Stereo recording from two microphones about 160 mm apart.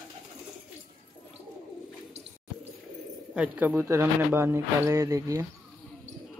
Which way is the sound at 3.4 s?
10° right (ahead or behind).